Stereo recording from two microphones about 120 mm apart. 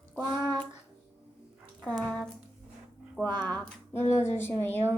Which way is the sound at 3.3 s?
15° left (ahead or behind).